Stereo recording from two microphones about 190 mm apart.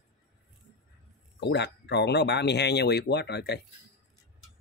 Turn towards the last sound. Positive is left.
turn(degrees=60)  # may be behind; listen again after turning